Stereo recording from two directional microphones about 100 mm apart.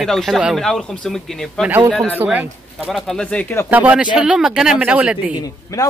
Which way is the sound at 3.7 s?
15° right (ahead or behind).